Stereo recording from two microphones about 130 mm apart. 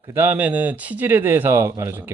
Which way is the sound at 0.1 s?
15° right (ahead or behind).